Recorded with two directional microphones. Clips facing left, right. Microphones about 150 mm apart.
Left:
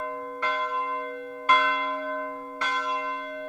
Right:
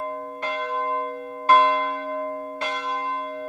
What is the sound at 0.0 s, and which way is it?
Church bell, 30° right (ahead or behind).